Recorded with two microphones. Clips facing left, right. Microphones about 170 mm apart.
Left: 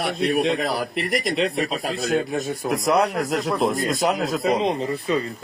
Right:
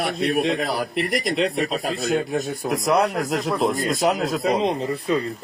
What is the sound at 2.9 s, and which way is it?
Speech, 50° left (ahead or behind).